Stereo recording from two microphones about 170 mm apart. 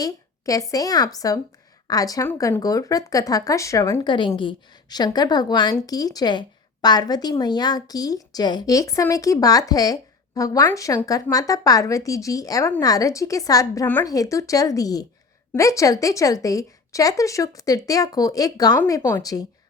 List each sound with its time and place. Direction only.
0.0 s a woman's voice: 20° left (ahead or behind)